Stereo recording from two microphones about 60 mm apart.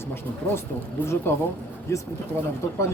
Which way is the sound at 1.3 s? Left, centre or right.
Left.